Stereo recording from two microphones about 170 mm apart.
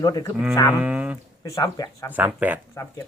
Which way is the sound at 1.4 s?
20° left (ahead or behind).